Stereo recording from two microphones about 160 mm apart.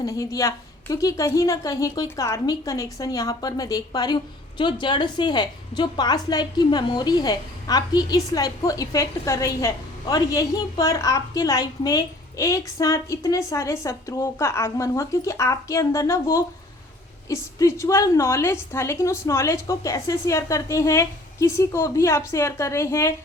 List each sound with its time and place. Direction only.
0.0 s a woman's voice: 20° left (ahead or behind)